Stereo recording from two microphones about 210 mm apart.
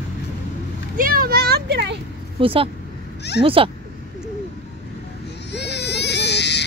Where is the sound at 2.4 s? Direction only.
25° right (ahead or behind).